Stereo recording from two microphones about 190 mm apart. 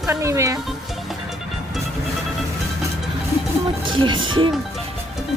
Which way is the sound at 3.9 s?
25° right (ahead or behind).